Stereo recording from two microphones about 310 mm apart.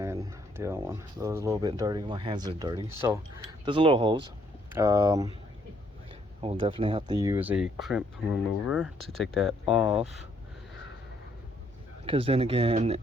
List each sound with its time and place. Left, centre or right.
0.0 s speech: centre
12.0 s speech: centre